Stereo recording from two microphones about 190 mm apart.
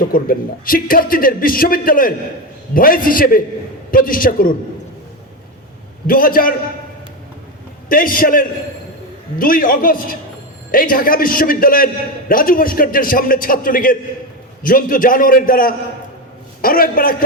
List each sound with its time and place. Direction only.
0.0 s a man's voice: 50° left (ahead or behind)
6.1 s a man's voice: 50° left (ahead or behind)
7.9 s a man's voice: 50° left (ahead or behind)